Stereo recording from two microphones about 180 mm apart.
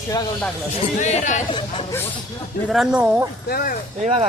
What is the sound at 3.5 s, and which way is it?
Speech, 50° left (ahead or behind).